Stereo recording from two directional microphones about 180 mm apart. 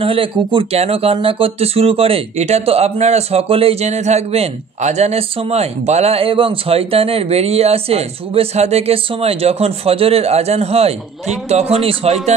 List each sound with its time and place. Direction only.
0.0 s speech: 30° right (ahead or behind)